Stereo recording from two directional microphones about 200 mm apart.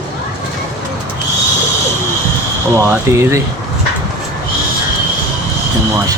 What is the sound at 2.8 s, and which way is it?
Speech, 15° right (ahead or behind).